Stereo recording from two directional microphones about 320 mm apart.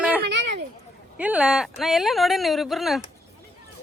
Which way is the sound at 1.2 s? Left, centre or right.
Centre.